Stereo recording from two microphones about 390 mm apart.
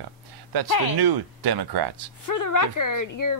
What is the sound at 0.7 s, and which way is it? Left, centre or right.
Speech, left.